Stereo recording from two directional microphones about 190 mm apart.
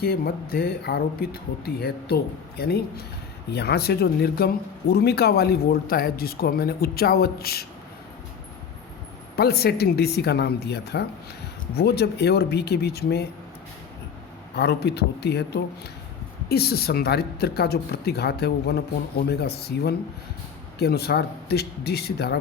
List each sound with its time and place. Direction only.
0.0 s speech: 55° left (ahead or behind)
9.3 s speech: 55° left (ahead or behind)
14.5 s speech: 60° left (ahead or behind)